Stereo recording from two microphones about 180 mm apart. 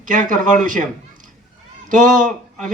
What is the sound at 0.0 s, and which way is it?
Speech, 45° right (ahead or behind).